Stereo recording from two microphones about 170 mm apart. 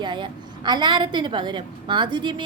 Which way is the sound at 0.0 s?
25° right (ahead or behind).